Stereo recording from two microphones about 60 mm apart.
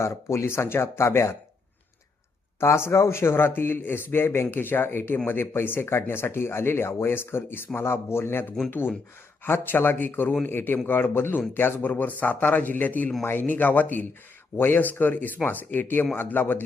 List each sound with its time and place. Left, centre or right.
0.0 s speech: left
2.6 s speech: left